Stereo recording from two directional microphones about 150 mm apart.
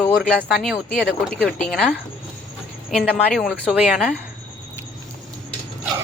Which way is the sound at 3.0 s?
Centre (ahead or behind).